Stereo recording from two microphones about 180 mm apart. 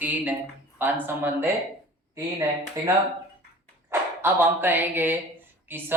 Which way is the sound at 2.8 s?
15° right (ahead or behind).